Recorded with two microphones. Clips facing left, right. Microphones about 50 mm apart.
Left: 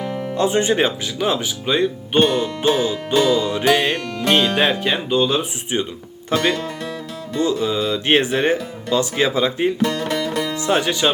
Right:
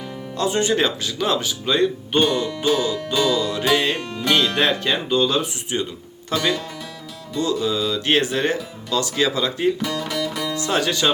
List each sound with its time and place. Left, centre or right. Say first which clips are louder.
0.0 s music: left 8 dB; left
0.3 s speech: left 2 dB; left
2.5 s speech: left 2 dB; left
4.3 s speech: left 2 dB; centre
5.7 s speech: left 3 dB; left
10.2 s music: left 2 dB; centre